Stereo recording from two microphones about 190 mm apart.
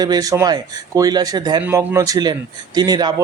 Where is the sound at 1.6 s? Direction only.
10° right (ahead or behind).